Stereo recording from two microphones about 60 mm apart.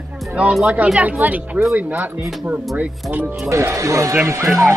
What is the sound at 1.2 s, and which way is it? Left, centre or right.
Speech, right.